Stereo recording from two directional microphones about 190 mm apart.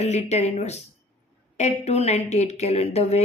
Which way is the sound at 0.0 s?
35° left (ahead or behind).